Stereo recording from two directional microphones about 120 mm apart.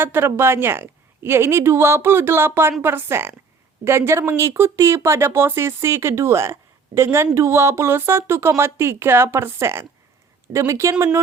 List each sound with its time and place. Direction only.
0.0 s speech: 20° right (ahead or behind)